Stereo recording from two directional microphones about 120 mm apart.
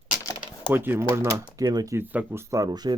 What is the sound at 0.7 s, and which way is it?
Speech, 15° right (ahead or behind).